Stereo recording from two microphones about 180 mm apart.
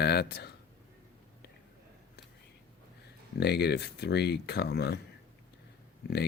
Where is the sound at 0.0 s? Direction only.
65° left (ahead or behind).